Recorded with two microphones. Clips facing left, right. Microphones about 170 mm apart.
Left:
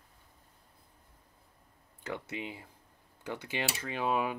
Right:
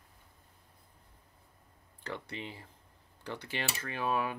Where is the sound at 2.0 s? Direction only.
10° left (ahead or behind).